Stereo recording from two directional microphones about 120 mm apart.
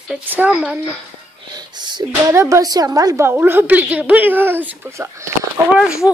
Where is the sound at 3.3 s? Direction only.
15° right (ahead or behind).